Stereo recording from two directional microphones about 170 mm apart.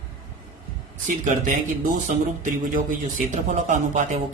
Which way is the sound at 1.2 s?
50° right (ahead or behind).